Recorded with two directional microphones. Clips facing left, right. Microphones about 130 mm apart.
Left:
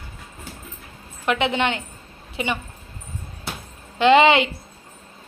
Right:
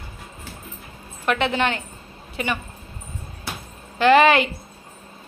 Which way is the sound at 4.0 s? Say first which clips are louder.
Even; 20° left (ahead or behind).